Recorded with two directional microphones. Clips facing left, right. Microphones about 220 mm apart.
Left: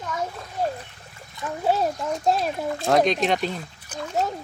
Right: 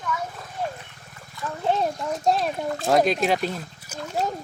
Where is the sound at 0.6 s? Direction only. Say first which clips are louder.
Left 4 dB; 40° left (ahead or behind).